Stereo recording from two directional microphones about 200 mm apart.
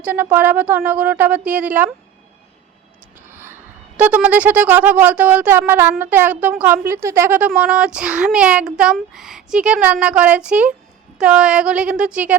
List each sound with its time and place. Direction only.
0.0 s speech: 10° right (ahead or behind)
3.2 s speech: 10° right (ahead or behind)